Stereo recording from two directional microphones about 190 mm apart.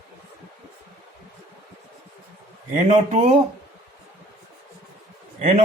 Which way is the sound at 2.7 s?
40° right (ahead or behind).